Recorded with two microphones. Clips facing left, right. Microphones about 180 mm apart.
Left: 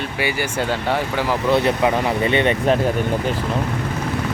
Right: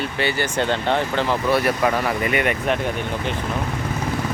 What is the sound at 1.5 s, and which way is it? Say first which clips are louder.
Speech: left 3 dB; 20° left (ahead or behind).